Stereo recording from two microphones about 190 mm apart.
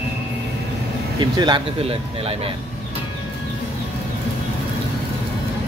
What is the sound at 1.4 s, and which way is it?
Speech, 25° right (ahead or behind).